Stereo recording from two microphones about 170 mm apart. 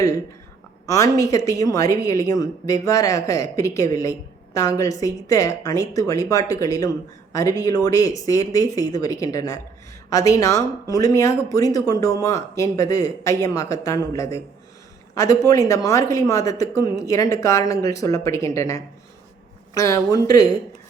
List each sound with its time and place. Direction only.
0.9 s a woman's voice: 20° left (ahead or behind)